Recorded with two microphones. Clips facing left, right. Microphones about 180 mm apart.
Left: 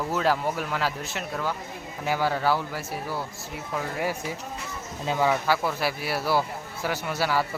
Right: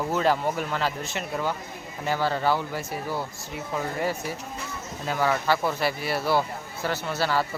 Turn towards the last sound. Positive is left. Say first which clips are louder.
# even
turn(degrees=10)  # may be behind; listen again after turning